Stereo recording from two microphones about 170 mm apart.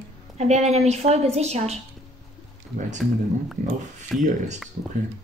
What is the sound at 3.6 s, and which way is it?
Speech, 45° right (ahead or behind).